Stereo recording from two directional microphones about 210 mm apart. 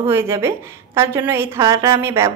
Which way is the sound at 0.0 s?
10° right (ahead or behind).